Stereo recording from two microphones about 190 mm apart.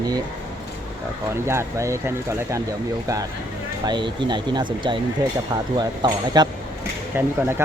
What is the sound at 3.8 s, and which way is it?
Speech, 25° right (ahead or behind).